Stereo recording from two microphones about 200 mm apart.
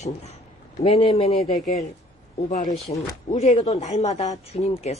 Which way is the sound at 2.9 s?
30° left (ahead or behind).